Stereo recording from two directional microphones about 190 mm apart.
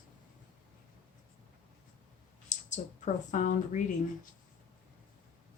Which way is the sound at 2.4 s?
40° left (ahead or behind).